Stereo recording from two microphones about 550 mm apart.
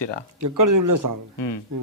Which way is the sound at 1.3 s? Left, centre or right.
Left.